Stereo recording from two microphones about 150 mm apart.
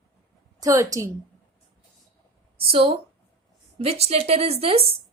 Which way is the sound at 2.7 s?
40° right (ahead or behind).